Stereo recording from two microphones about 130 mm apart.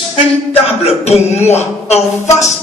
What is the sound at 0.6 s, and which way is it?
Speech, 50° left (ahead or behind).